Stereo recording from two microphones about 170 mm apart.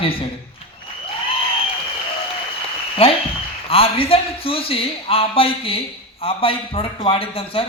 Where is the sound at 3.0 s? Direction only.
35° left (ahead or behind).